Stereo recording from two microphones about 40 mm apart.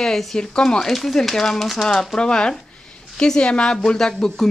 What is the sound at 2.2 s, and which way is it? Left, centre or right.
Speech, left.